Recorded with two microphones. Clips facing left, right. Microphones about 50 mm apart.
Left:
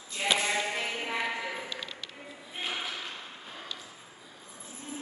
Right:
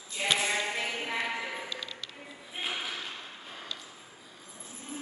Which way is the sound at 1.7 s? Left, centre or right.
Left.